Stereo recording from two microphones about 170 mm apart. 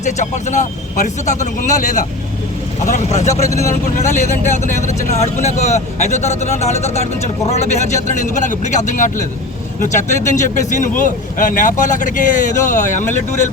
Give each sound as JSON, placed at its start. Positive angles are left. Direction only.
{"t": 0.0, "sound": "speech", "side_deg": 45}
{"t": 3.5, "sound": "speech", "side_deg": 15}
{"t": 3.9, "sound": "speech", "side_deg": 45}
{"t": 4.5, "sound": "speech", "side_deg": -45}
{"t": 4.9, "sound": "speech", "side_deg": 45}